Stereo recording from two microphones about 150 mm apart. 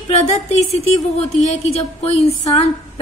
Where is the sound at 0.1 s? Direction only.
50° left (ahead or behind).